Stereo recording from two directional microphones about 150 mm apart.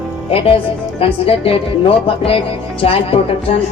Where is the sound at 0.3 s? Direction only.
40° left (ahead or behind).